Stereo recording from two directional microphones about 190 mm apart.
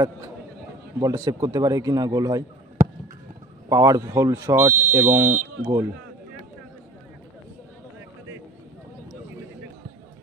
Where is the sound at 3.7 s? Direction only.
15° right (ahead or behind).